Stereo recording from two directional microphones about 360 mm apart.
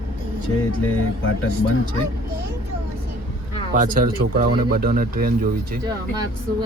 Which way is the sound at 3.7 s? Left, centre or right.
Right.